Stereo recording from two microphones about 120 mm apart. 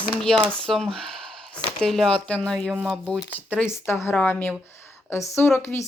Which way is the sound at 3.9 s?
20° left (ahead or behind).